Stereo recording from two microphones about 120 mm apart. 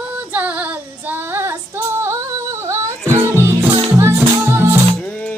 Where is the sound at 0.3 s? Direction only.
15° right (ahead or behind).